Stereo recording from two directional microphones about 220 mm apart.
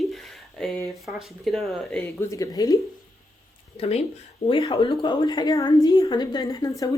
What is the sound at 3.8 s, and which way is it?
A woman's voice, 30° left (ahead or behind).